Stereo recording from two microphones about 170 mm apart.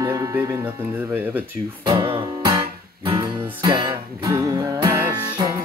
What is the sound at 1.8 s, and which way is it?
Speech, 30° right (ahead or behind).